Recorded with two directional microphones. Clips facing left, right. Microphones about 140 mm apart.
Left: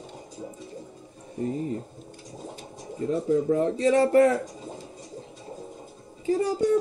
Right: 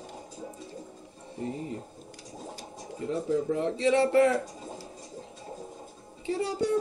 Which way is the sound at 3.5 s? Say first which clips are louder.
Left 2 dB; 40° left (ahead or behind).